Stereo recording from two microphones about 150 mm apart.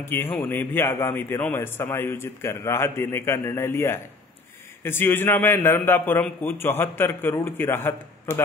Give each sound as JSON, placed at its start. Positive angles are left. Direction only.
{"t": 0.0, "sound": "a man's voice", "side_deg": 15}